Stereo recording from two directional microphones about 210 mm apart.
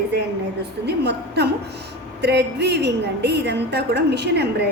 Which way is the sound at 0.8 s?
50° right (ahead or behind).